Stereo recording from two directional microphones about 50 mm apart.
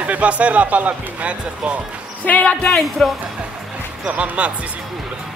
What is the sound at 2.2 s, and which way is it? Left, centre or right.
Speech, left.